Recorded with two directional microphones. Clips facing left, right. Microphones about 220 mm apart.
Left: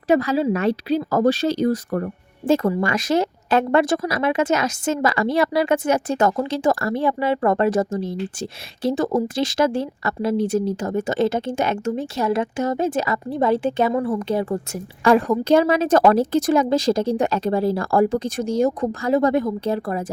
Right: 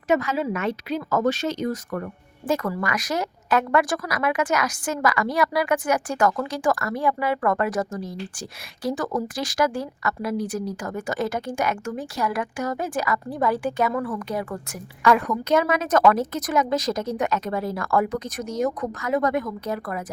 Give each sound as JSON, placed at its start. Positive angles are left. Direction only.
{"t": 0.1, "sound": "a woman's voice", "side_deg": 35}